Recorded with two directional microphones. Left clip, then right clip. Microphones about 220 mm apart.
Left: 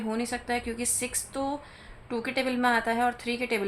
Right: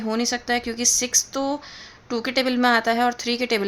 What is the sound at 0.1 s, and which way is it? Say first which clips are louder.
Speech: right 8 dB; 50° right (ahead or behind).